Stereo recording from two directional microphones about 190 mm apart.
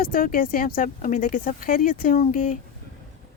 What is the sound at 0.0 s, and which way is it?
Speech, 50° left (ahead or behind).